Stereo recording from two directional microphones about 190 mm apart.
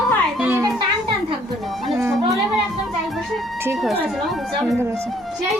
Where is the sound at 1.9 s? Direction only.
Centre (ahead or behind).